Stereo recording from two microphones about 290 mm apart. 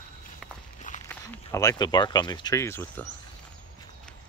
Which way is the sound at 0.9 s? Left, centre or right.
Left.